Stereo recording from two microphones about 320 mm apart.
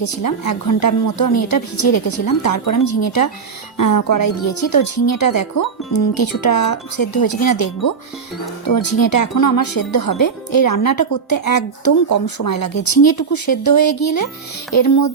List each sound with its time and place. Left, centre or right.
0.0 s speech: left
3.8 s speech: left
8.6 s speech: left
14.8 s child singing: left